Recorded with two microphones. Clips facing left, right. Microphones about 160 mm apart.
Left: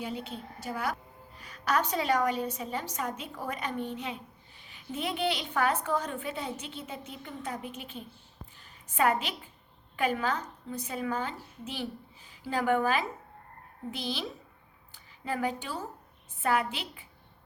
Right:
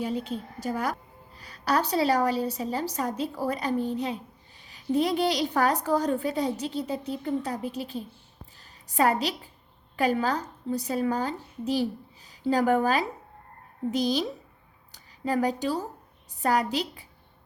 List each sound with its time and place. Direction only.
0.0 s a woman's voice: 40° right (ahead or behind)